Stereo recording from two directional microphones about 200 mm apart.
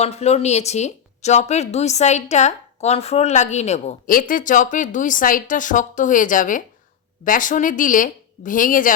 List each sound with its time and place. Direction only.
0.0 s a woman's voice: 30° left (ahead or behind)